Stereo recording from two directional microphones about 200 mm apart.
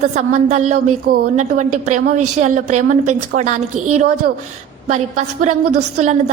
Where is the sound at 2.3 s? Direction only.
35° right (ahead or behind).